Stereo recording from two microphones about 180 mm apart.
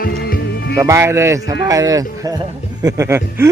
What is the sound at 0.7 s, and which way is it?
A man's voice, 15° right (ahead or behind).